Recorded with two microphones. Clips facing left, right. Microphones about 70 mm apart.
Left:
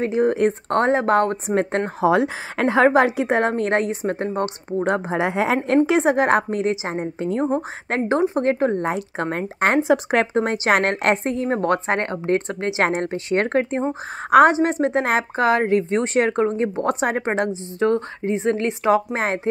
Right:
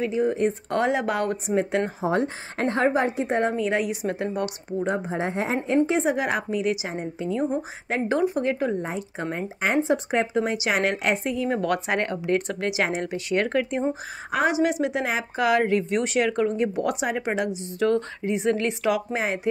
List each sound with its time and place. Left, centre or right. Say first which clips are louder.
0.0 s speech: left 4 dB; left
0.7 s a woman's voice: left 5 dB; left
2.0 s a woman's voice: left 6 dB; left
3.8 s a woman's voice: left 3 dB; left
4.8 s speech: left 5 dB; left
5.9 s a woman's voice: left 6 dB; left
8.7 s speech: left 6 dB; left
10.3 s a woman's voice: left 5 dB; left
12.8 s a woman's voice: left 9 dB; left
13.1 s a woman's voice: left 3 dB; left
15.3 s a woman's voice: left 1 dB; left
19.1 s a woman's voice: left 3 dB; left